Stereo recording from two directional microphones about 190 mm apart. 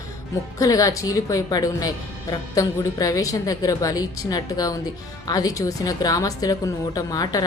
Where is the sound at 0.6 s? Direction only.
20° left (ahead or behind).